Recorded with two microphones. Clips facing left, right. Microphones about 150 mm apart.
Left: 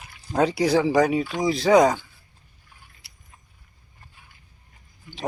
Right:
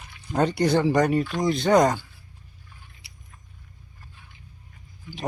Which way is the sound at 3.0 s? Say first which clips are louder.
Right 5 dB; centre (ahead or behind).